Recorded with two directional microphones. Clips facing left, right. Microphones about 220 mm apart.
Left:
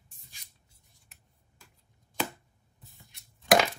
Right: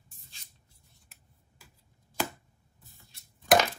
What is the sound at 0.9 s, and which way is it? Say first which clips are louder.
Scissors: right 1 dB; centre (ahead or behind).